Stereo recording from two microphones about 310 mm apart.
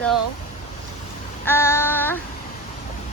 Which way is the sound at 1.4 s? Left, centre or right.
Centre.